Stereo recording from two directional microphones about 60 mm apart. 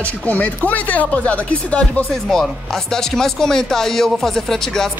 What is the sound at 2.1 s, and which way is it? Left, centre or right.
Speech, centre.